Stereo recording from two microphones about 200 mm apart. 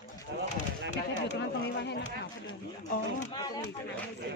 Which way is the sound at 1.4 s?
60° left (ahead or behind).